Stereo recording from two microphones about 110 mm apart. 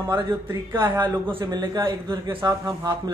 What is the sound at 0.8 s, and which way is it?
A man's voice, 40° right (ahead or behind).